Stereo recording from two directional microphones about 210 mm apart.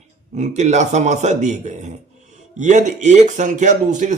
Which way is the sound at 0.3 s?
35° right (ahead or behind).